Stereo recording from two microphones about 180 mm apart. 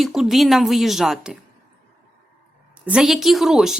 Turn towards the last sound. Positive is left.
turn(degrees=0)  # may be behind; listen again after turning